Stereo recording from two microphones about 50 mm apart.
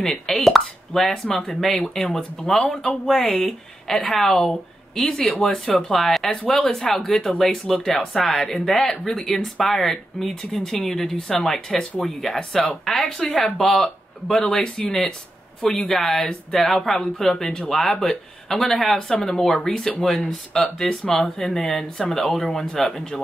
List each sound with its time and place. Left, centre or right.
0.0 s speech: centre